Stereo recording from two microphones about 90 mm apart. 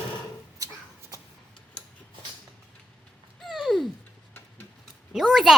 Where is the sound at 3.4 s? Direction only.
Centre (ahead or behind).